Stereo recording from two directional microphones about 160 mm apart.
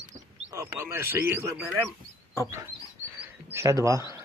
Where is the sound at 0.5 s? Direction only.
15° right (ahead or behind).